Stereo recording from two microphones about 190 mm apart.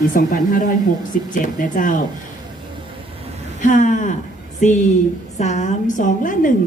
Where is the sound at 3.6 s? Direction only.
40° left (ahead or behind).